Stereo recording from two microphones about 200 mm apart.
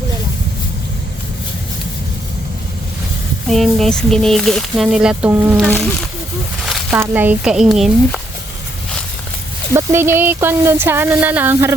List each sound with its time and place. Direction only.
3.5 s speech: centre (ahead or behind)
6.9 s speech: 10° right (ahead or behind)
9.7 s speech: 10° right (ahead or behind)